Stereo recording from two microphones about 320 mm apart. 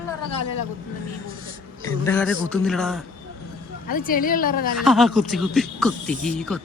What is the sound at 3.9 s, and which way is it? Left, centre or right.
Speech, left.